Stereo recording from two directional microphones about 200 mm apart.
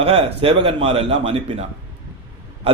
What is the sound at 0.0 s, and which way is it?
A man's voice, 30° right (ahead or behind).